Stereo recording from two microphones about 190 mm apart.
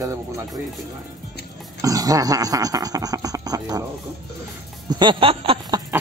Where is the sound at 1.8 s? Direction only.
20° right (ahead or behind).